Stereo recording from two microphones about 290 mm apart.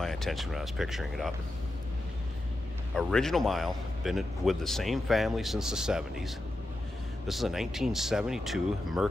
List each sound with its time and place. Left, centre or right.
0.0 s a man's voice: centre
2.9 s a man's voice: centre